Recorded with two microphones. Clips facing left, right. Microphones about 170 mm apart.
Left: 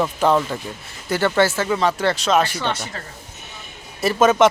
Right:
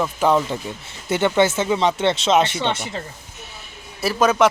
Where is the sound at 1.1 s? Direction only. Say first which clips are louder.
Right 1 dB; 20° right (ahead or behind).